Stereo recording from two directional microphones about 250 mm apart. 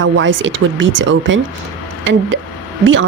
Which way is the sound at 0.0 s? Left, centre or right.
Right.